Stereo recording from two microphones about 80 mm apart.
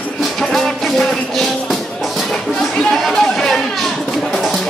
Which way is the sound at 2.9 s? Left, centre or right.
Centre.